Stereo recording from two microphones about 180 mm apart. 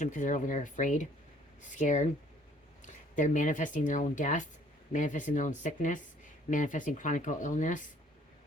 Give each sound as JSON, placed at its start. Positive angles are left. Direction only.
{"t": 0.0, "sound": "speech", "side_deg": 45}